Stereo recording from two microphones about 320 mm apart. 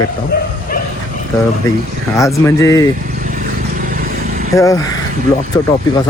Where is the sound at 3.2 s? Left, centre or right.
Right.